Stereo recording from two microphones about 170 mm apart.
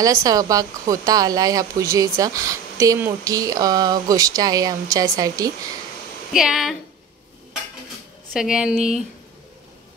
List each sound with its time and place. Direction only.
0.0 s speech: 20° right (ahead or behind)
6.3 s speech: 5° right (ahead or behind)
8.3 s speech: 5° right (ahead or behind)